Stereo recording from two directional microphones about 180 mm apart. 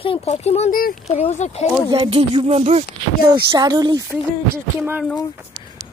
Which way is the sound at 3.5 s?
20° right (ahead or behind).